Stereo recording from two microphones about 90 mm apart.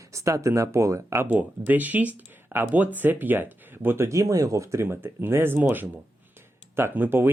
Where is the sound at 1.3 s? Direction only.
20° right (ahead or behind).